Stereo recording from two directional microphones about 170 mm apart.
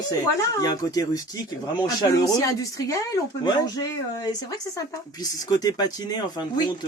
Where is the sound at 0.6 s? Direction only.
20° left (ahead or behind).